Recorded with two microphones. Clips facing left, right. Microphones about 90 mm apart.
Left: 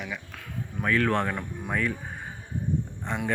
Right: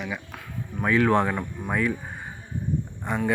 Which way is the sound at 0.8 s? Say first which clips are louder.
Right 4 dB; 15° right (ahead or behind).